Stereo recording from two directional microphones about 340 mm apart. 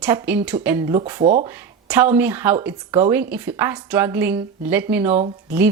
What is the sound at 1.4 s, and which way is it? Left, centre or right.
Speech, centre.